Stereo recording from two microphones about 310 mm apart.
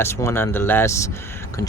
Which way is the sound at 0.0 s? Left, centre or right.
Centre.